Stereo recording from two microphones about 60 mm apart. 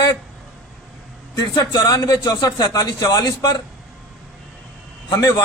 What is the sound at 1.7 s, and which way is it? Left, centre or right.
A man's voice, left.